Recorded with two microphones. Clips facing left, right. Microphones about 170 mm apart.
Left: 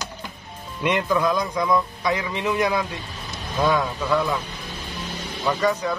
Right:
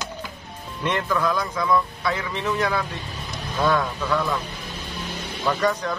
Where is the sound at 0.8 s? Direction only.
15° left (ahead or behind).